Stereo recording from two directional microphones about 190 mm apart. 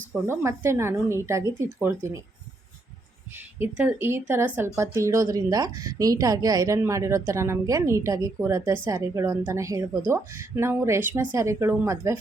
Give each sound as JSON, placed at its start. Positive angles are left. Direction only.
{"t": 0.3, "sound": "speech", "side_deg": -15}
{"t": 3.3, "sound": "speech", "side_deg": -10}